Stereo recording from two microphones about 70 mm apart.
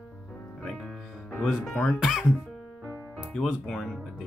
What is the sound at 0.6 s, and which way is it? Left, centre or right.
Music, centre.